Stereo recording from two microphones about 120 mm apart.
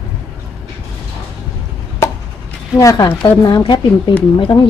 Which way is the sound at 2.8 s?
35° left (ahead or behind).